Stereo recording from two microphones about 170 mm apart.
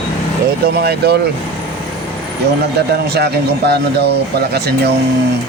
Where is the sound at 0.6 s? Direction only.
70° right (ahead or behind).